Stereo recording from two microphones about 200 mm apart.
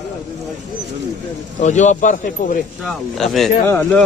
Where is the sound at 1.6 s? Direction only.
35° left (ahead or behind).